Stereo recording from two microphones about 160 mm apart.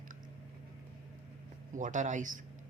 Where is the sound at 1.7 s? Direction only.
50° right (ahead or behind).